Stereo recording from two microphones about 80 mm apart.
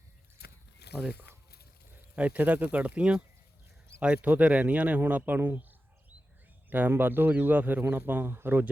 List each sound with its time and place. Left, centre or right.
2.1 s speech: centre
6.7 s speech: right